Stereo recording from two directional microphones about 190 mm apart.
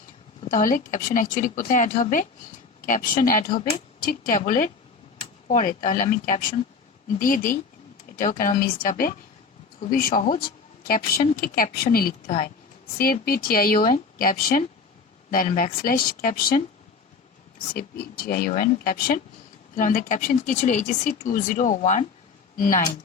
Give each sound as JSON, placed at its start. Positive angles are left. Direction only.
{"t": 0.4, "sound": "speech", "side_deg": 45}
{"t": 13.2, "sound": "speech", "side_deg": 50}
{"t": 17.7, "sound": "speech", "side_deg": 50}